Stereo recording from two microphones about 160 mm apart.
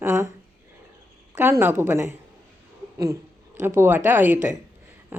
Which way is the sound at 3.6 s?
15° right (ahead or behind).